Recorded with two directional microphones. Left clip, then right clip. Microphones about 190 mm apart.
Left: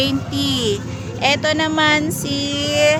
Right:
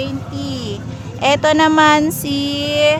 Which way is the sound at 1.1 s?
25° right (ahead or behind).